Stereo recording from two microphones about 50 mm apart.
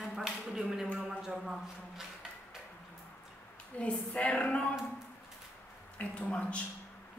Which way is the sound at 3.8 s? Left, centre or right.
Left.